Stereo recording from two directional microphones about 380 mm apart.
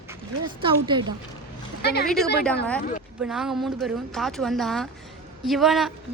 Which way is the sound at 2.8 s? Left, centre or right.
Centre.